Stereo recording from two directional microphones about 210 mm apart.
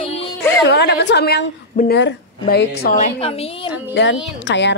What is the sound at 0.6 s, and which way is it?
Speech, 55° left (ahead or behind).